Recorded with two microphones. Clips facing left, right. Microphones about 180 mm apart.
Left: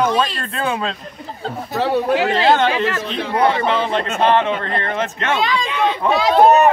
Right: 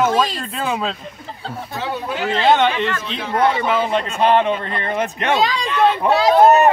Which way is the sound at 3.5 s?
5° right (ahead or behind).